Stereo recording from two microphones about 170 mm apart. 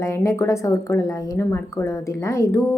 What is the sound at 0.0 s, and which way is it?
A woman's voice, 15° left (ahead or behind).